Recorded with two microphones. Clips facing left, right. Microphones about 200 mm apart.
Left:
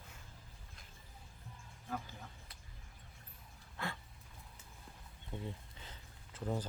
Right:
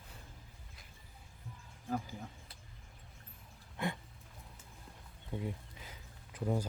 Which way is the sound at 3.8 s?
20° right (ahead or behind).